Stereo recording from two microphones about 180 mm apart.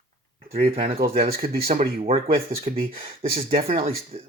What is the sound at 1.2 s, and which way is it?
Speech, 55° right (ahead or behind).